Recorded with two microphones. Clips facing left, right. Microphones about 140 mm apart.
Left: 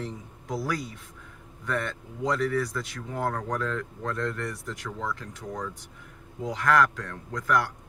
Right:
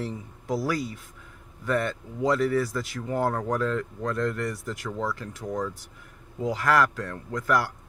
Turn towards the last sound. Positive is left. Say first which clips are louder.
# right 1 dB
turn(degrees=-5)  # may be behind; listen again after turning